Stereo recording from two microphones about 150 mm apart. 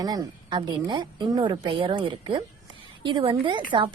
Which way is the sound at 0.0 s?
25° right (ahead or behind).